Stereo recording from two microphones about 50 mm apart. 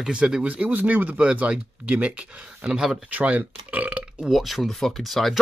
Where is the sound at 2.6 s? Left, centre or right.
Centre.